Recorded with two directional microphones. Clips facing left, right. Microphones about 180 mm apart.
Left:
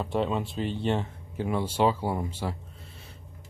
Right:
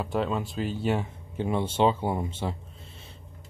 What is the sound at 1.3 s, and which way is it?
Speech, 25° right (ahead or behind).